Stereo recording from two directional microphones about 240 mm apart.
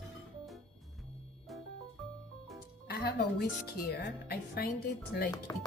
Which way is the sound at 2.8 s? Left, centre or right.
Left.